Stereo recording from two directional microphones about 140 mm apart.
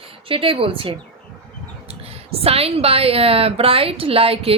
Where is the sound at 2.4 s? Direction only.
45° right (ahead or behind).